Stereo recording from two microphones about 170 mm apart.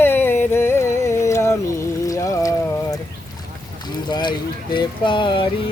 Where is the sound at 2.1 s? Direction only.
20° left (ahead or behind).